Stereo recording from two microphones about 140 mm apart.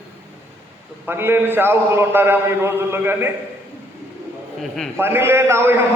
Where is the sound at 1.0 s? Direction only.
15° right (ahead or behind).